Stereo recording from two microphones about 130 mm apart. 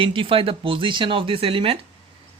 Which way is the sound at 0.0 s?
45° right (ahead or behind).